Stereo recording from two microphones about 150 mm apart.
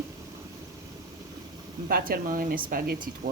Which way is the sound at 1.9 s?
75° right (ahead or behind).